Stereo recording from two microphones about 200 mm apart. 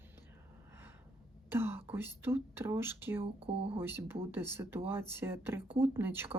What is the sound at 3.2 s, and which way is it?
Speech, 30° right (ahead or behind).